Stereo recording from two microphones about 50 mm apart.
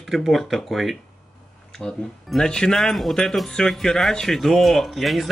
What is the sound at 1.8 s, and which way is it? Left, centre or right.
Speech, centre.